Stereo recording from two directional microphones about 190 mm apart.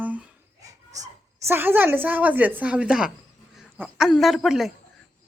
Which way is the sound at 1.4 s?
10° right (ahead or behind).